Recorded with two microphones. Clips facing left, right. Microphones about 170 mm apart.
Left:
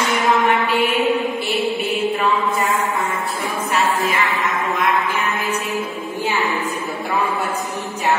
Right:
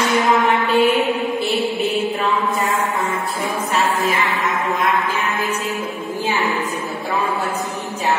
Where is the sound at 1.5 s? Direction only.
Centre (ahead or behind).